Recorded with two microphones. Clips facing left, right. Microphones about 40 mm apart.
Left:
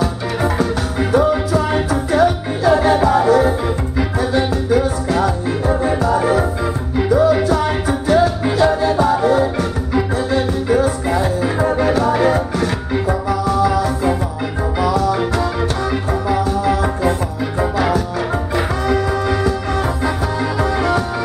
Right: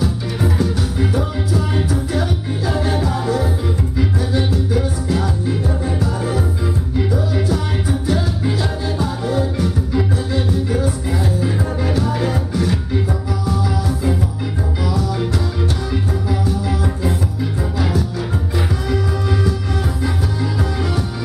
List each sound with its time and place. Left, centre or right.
0.0 s music: left
7.4 s music: left
10.8 s music: left
11.9 s music: left
13.5 s music: left